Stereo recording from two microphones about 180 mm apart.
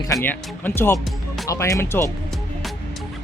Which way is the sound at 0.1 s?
10° left (ahead or behind).